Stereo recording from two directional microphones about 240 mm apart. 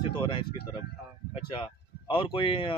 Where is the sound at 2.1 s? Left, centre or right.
Left.